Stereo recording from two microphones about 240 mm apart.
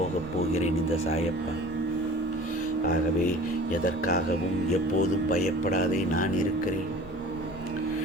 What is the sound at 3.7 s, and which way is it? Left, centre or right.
Speech, left.